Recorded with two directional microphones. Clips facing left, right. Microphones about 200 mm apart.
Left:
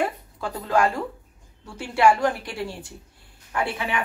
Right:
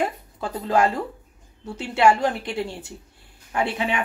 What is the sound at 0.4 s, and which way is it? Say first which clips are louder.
Speech: right 1 dB; 20° right (ahead or behind).